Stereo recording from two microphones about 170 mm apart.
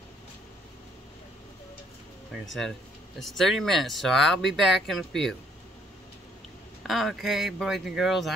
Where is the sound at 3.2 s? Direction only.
Centre (ahead or behind).